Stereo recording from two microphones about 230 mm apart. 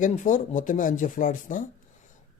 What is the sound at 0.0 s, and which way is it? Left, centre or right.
Speech, left.